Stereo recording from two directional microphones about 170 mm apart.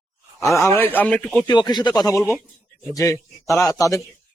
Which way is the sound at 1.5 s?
25° left (ahead or behind).